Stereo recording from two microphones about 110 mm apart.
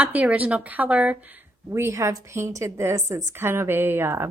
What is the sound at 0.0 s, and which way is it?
A woman's voice, 15° right (ahead or behind).